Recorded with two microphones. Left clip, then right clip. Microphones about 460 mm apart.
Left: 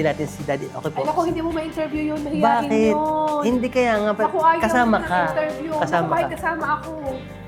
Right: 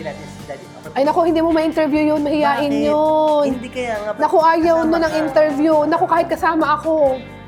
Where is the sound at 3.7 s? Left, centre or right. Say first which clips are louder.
Left 3 dB; left.